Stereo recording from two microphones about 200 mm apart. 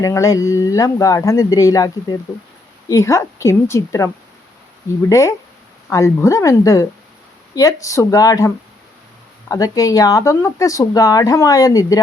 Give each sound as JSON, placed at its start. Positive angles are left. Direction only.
{"t": 0.0, "sound": "speech", "side_deg": 15}